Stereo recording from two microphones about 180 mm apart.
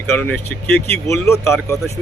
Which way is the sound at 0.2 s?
10° left (ahead or behind).